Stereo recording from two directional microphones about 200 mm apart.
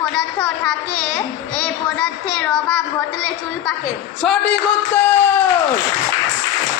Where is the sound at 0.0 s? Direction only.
Centre (ahead or behind).